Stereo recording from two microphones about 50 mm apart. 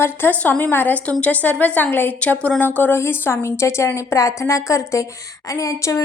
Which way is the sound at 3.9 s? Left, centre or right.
Left.